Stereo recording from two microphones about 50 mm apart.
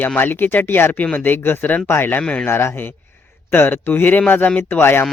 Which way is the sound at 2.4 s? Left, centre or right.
Left.